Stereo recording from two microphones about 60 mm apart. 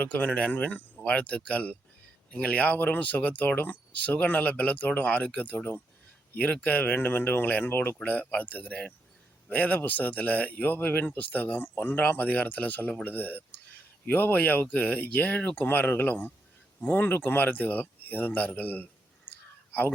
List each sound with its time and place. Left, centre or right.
0.0 s speech: left